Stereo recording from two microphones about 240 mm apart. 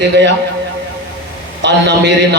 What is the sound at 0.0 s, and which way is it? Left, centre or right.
Speech, right.